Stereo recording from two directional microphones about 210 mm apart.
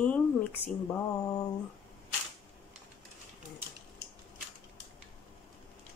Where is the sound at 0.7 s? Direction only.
5° left (ahead or behind).